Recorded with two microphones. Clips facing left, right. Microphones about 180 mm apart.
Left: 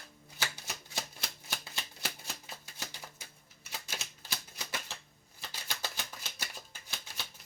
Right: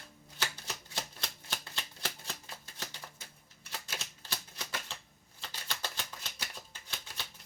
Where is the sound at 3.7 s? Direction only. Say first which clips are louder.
Even; 10° left (ahead or behind).